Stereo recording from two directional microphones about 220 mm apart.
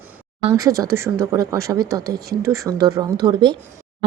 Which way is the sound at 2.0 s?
45° right (ahead or behind).